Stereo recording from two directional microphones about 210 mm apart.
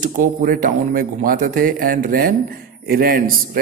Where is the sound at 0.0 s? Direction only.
40° right (ahead or behind).